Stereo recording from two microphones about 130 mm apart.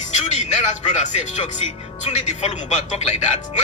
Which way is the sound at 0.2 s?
60° left (ahead or behind).